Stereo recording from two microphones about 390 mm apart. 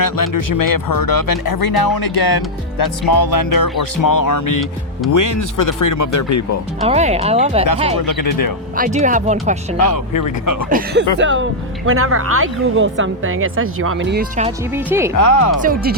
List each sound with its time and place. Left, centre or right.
0.0 s speech: left
6.8 s speech: centre
7.9 s speech: left
8.7 s speech: centre
9.7 s speech: left
10.7 s a woman's voice: right
14.7 s a woman's voice: centre
15.1 s speech: left
15.6 s speech: right